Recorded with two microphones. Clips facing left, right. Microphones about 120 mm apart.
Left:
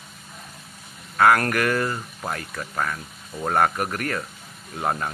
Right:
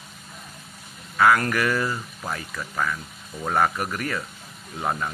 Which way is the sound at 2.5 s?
35° left (ahead or behind).